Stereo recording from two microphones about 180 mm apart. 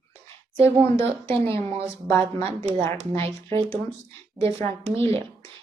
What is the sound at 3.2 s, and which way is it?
Speech, 30° right (ahead or behind).